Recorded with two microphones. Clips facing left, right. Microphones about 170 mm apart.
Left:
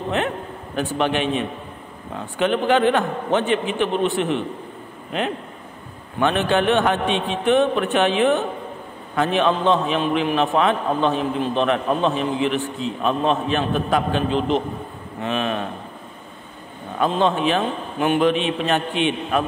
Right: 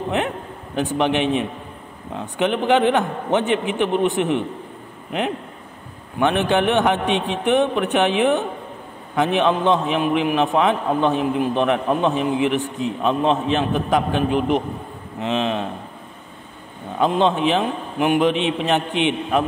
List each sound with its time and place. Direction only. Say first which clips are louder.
0.7 s a man's voice: right 2 dB; 20° right (ahead or behind)
6.1 s a man's voice: right 1 dB; 15° right (ahead or behind)
17.0 s a man's voice: right 1 dB; 20° right (ahead or behind)